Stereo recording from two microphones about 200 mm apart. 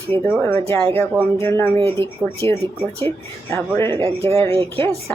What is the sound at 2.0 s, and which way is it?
Speech, 25° right (ahead or behind).